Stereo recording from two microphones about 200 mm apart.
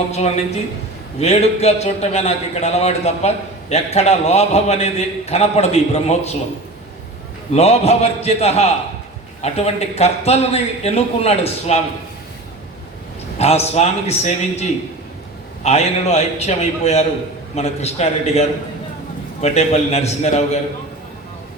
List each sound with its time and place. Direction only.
1.2 s a man's voice: 30° left (ahead or behind)
7.5 s a man's voice: 30° left (ahead or behind)
13.4 s a man's voice: 30° left (ahead or behind)